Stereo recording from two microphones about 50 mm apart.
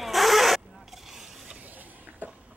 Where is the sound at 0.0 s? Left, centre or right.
Centre.